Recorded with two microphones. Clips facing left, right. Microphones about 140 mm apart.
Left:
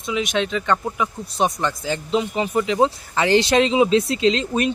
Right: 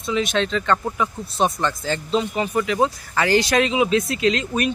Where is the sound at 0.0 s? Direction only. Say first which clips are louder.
Right 1 dB; 15° left (ahead or behind).